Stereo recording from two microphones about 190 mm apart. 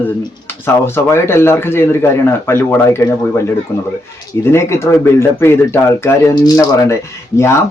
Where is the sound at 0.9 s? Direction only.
15° left (ahead or behind).